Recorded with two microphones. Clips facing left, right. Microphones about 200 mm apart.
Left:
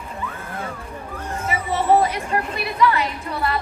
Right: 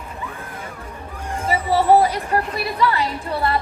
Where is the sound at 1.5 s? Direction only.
35° right (ahead or behind).